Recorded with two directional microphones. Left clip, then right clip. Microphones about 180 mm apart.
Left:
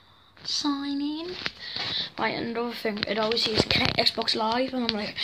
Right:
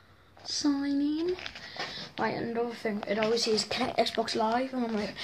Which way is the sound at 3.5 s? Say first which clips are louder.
Left 5 dB; 10° right (ahead or behind).